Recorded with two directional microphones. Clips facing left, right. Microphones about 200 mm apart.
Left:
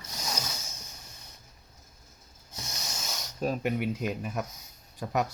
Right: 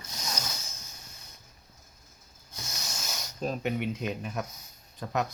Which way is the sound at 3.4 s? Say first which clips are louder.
Left 2 dB; 5° left (ahead or behind).